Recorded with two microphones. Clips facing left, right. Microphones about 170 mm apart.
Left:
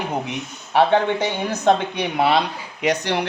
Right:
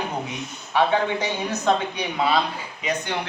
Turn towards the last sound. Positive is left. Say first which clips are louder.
# left 6 dB
turn(degrees=80)